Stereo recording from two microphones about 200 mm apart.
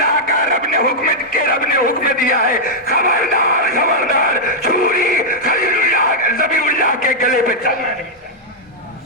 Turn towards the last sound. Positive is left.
turn(degrees=45)  # may be behind; listen again after turning